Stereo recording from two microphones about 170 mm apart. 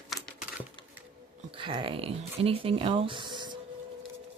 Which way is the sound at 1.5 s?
30° right (ahead or behind).